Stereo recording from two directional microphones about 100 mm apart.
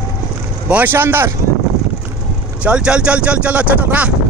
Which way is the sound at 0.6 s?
15° right (ahead or behind).